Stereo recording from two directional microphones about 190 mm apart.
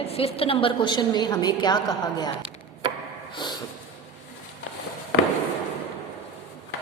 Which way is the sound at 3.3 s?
25° left (ahead or behind).